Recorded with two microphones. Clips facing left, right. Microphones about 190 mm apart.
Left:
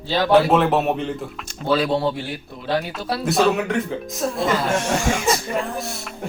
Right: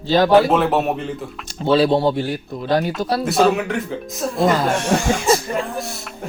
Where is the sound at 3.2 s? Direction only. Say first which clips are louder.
Right 1 dB; centre (ahead or behind).